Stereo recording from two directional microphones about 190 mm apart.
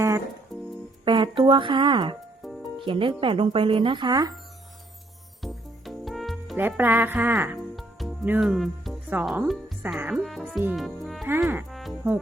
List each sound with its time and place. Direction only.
1.0 s a woman's voice: 25° right (ahead or behind)
2.4 s music: centre (ahead or behind)
2.8 s speech: 25° right (ahead or behind)
5.4 s music: centre (ahead or behind)
6.6 s speech: 10° right (ahead or behind)
7.8 s music: centre (ahead or behind)
9.8 s speech: 10° right (ahead or behind)
10.6 s music: 5° right (ahead or behind)
11.3 s speech: 10° right (ahead or behind)
11.7 s music: centre (ahead or behind)